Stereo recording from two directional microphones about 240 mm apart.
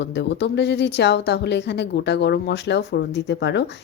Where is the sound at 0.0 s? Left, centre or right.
Left.